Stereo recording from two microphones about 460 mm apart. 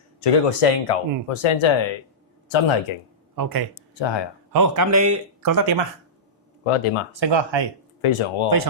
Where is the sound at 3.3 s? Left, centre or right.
Right.